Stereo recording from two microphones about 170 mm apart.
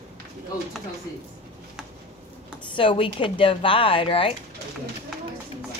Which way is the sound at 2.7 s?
30° left (ahead or behind).